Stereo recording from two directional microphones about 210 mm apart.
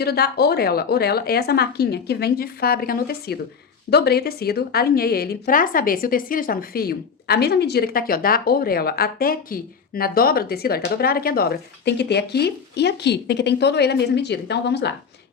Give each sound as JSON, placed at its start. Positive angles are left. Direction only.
{"t": 0.0, "sound": "a woman's voice", "side_deg": 50}